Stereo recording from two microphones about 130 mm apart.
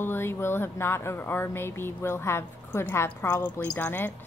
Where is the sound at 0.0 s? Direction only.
15° left (ahead or behind).